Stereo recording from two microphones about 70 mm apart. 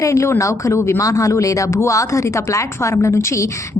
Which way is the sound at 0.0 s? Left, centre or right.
Left.